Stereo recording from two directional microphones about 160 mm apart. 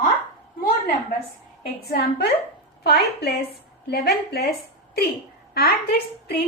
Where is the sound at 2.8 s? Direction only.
90° left.